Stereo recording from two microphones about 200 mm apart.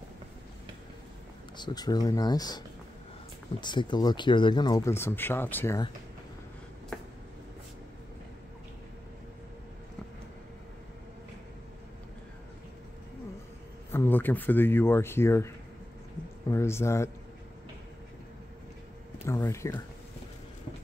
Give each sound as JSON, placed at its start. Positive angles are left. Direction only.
{"t": 1.6, "sound": "speech", "side_deg": 20}
{"t": 3.6, "sound": "speech", "side_deg": 20}
{"t": 13.9, "sound": "speech", "side_deg": 10}
{"t": 19.2, "sound": "speech", "side_deg": 15}